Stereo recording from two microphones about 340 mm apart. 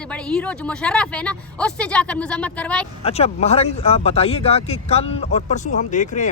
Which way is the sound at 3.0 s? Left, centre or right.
Centre.